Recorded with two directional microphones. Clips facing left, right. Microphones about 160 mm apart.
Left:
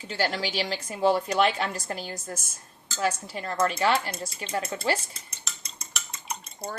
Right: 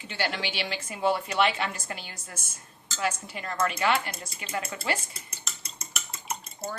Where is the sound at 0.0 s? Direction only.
40° left (ahead or behind).